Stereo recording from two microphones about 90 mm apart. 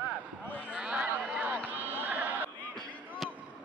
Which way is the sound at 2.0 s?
20° right (ahead or behind).